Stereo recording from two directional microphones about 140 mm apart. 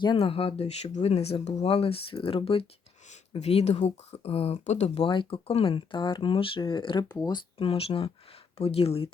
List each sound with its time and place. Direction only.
0.0 s speech: 35° left (ahead or behind); by 5.0 s 55° left (ahead or behind)
5.0 s speech: 35° left (ahead or behind)
7.6 s speech: 45° left (ahead or behind)